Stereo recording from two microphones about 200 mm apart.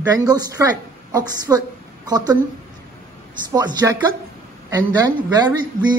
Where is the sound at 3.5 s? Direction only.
20° right (ahead or behind).